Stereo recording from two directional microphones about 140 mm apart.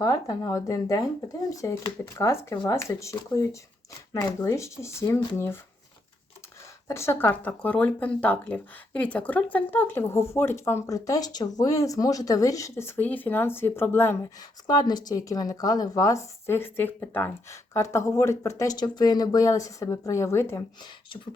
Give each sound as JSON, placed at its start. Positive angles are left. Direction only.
{"t": 0.0, "sound": "speech", "side_deg": 25}
{"t": 6.8, "sound": "speech", "side_deg": 20}
{"t": 14.7, "sound": "speech", "side_deg": 30}